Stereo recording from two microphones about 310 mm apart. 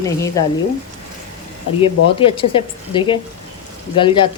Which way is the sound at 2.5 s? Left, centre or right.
Centre.